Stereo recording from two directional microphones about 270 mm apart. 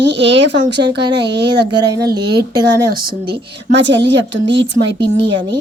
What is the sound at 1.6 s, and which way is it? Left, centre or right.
Speech, centre.